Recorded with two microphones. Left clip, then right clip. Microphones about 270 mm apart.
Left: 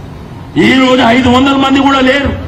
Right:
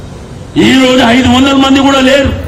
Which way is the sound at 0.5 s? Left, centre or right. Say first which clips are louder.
Right 1 dB; left.